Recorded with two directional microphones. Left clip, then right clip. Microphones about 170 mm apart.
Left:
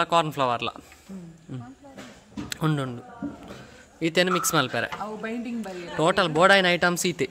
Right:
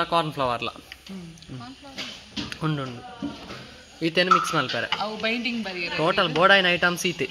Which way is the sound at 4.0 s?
15° left (ahead or behind).